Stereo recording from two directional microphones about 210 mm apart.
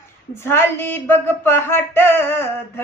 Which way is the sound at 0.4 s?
10° left (ahead or behind).